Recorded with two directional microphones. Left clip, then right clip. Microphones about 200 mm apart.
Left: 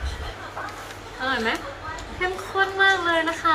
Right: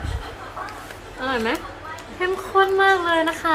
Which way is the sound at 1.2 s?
30° right (ahead or behind).